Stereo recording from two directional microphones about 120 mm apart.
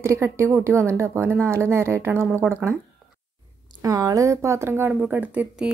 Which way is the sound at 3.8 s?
30° right (ahead or behind).